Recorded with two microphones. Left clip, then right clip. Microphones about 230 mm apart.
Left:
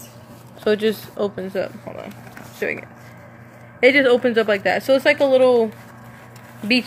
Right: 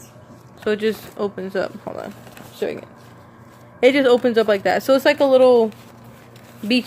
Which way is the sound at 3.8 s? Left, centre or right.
Centre.